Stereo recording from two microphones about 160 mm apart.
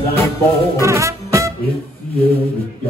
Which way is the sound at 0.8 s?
20° right (ahead or behind).